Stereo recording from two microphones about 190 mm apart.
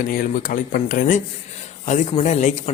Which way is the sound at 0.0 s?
45° left (ahead or behind).